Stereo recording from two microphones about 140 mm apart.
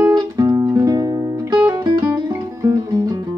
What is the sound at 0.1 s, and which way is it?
Music, 25° right (ahead or behind).